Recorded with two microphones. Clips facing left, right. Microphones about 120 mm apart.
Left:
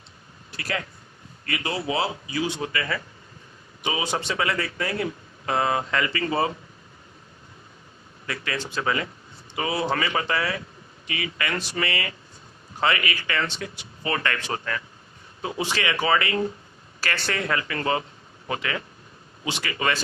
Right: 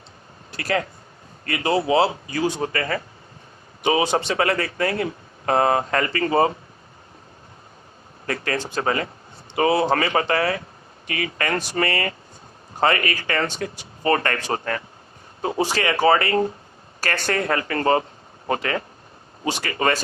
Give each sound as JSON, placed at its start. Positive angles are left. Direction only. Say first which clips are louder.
{"t": 1.5, "sound": "speech", "louder": "right 8 dB", "side_deg": -30}
{"t": 4.0, "sound": "speech", "louder": "right 6 dB", "side_deg": -70}
{"t": 4.4, "sound": "speech", "louder": "right 5 dB", "side_deg": -45}
{"t": 8.3, "sound": "speech", "louder": "right 5 dB", "side_deg": -45}